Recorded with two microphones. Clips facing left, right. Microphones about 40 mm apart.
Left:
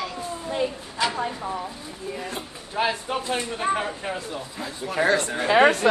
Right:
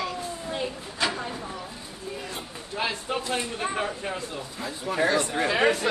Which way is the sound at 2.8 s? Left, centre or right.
Centre.